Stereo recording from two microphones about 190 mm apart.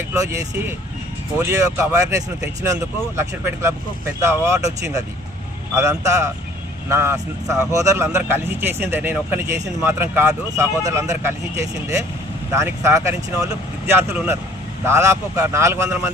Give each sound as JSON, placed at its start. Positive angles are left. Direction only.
{"t": 1.4, "sound": "a man's voice", "side_deg": -15}